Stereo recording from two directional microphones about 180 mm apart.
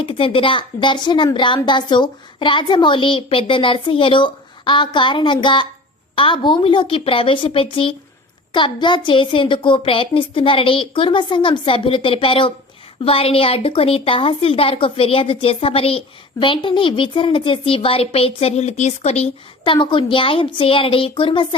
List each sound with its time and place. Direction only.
0.0 s a woman's voice: 30° left (ahead or behind)